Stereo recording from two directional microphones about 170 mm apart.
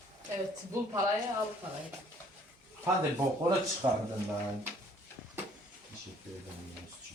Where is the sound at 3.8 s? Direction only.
35° right (ahead or behind).